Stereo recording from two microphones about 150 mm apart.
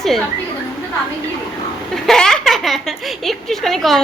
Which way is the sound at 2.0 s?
5° left (ahead or behind).